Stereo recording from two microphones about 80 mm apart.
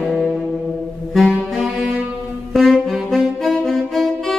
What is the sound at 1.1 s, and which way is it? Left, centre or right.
Saxophone, centre.